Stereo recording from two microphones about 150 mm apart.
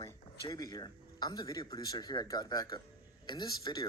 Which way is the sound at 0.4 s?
25° left (ahead or behind).